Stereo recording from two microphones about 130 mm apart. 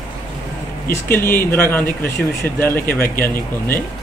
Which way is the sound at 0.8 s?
15° left (ahead or behind).